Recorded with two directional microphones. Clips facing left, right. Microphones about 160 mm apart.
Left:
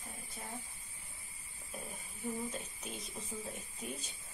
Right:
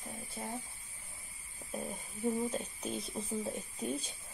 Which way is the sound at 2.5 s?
35° right (ahead or behind).